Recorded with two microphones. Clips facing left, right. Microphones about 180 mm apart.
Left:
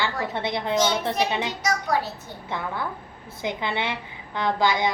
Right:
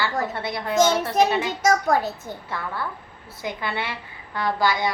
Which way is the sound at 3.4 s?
20° left (ahead or behind).